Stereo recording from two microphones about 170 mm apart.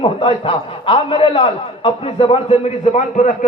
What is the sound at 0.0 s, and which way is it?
A man's voice, 30° left (ahead or behind).